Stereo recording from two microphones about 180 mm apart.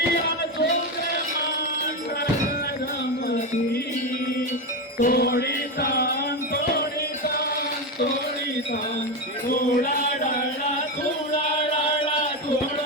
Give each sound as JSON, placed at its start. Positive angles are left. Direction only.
{"t": 4.9, "sound": "music", "side_deg": 55}
{"t": 9.5, "sound": "music", "side_deg": 50}